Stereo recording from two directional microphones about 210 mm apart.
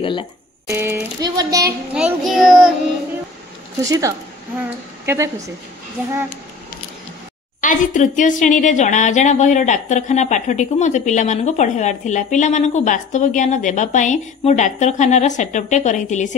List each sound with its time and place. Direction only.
0.0 s speech: 25° left (ahead or behind)
0.7 s child singing: 15° right (ahead or behind)
2.0 s child singing: centre (ahead or behind)
3.8 s child singing: 15° right (ahead or behind)
7.6 s speech: 35° left (ahead or behind)